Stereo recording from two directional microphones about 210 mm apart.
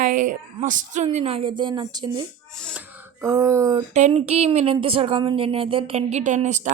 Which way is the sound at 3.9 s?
30° right (ahead or behind).